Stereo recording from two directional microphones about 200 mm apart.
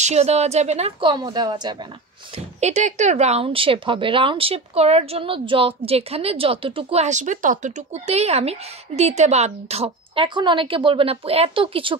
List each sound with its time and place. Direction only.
0.0 s a woman's voice: 35° right (ahead or behind)
2.3 s speech: 35° right (ahead or behind)